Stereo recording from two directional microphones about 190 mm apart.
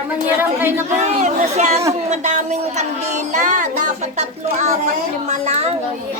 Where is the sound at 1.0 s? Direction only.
35° right (ahead or behind).